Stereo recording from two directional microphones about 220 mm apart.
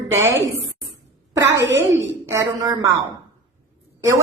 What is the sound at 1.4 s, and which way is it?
Speech, 55° right (ahead or behind).